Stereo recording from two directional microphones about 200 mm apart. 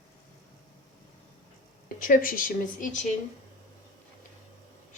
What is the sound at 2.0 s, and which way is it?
Speech, 40° left (ahead or behind).